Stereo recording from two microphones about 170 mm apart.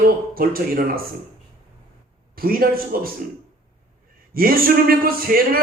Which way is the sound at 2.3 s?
60° right (ahead or behind).